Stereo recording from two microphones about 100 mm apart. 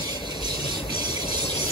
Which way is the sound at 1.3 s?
70° left (ahead or behind).